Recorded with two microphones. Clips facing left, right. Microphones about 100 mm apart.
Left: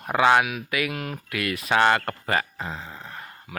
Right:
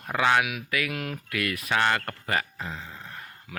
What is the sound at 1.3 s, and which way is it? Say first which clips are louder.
Speech: left 4 dB; 25° left (ahead or behind).